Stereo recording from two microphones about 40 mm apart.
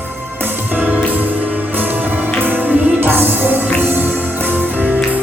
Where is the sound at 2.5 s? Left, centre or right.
Right.